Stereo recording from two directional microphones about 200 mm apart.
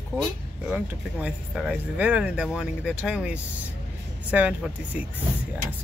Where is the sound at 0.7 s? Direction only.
5° right (ahead or behind).